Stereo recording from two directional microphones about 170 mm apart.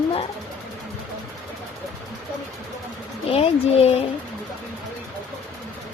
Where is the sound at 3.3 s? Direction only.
35° left (ahead or behind).